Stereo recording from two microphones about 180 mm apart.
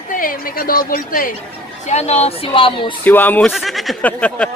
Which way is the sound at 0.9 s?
50° left (ahead or behind).